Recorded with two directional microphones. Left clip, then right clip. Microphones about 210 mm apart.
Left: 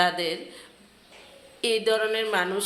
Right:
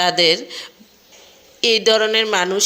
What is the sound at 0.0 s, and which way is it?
Speech, 35° right (ahead or behind).